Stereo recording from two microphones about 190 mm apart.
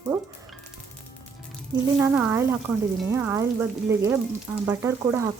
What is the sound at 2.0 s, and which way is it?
Speech, 10° right (ahead or behind).